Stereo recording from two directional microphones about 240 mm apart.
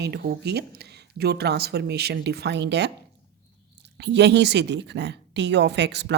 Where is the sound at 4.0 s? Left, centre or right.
Right.